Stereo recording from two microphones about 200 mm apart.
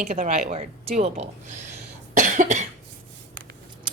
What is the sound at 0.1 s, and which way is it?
A woman's voice, 35° right (ahead or behind).